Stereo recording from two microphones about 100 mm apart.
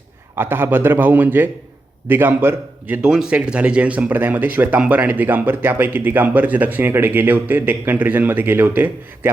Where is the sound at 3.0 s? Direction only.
5° right (ahead or behind).